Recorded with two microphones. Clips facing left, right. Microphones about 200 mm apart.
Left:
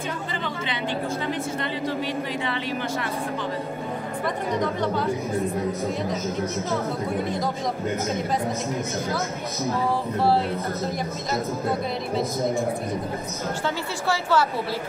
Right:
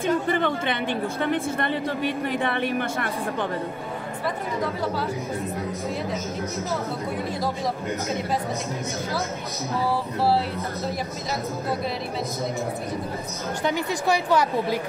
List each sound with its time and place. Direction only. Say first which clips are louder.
0.3 s a woman's voice: right 6 dB; 55° right (ahead or behind)
13.7 s a woman's voice: right 5 dB; 15° right (ahead or behind)